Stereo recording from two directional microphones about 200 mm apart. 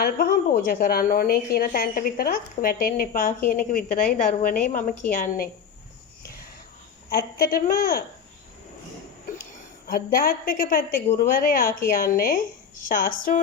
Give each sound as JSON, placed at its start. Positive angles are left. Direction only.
{"t": 0.0, "sound": "a woman's voice", "side_deg": 50}
{"t": 7.1, "sound": "a woman's voice", "side_deg": 50}
{"t": 9.8, "sound": "a woman's voice", "side_deg": 45}